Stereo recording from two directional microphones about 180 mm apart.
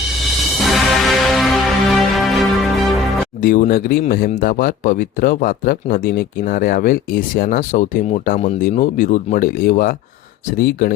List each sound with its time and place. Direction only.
0.6 s music: centre (ahead or behind)
3.4 s speech: 50° left (ahead or behind)